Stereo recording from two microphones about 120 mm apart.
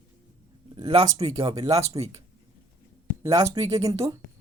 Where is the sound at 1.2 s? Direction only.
55° right (ahead or behind).